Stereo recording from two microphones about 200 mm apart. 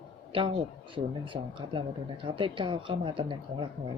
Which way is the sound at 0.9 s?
25° right (ahead or behind).